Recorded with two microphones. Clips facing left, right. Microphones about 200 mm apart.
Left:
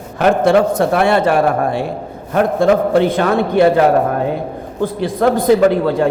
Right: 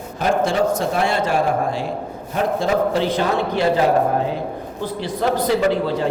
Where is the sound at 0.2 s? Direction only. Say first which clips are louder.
Left 7 dB; 60° left (ahead or behind).